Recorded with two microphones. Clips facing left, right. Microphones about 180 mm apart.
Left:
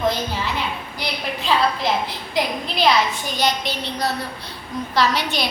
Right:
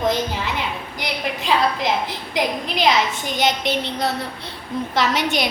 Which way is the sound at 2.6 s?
20° right (ahead or behind).